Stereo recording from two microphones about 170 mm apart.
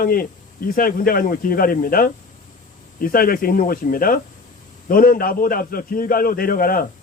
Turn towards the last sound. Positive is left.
turn(degrees=55)  # may be behind; listen again after turning